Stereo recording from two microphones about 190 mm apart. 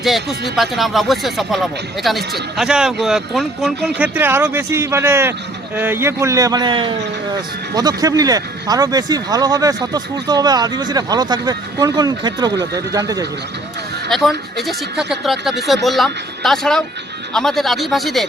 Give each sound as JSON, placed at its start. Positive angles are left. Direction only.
{"t": 0.0, "sound": "speech", "side_deg": 0}
{"t": 14.1, "sound": "speech", "side_deg": 0}